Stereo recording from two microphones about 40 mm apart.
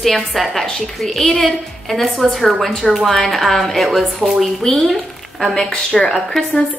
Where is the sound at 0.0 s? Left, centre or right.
Centre.